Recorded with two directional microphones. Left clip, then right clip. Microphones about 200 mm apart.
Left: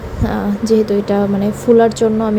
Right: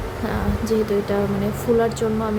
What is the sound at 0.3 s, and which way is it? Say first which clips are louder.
A woman's voice: left 8 dB; 25° left (ahead or behind).